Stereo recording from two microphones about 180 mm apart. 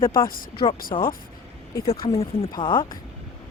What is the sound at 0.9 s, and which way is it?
Speech, 20° left (ahead or behind).